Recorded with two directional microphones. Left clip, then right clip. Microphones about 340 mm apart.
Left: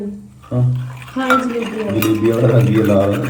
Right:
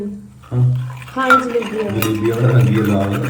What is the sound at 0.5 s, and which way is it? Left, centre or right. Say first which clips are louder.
Speech: left 2 dB; centre.